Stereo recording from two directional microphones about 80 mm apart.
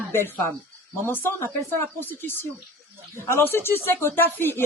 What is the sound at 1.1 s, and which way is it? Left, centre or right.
Speech, left.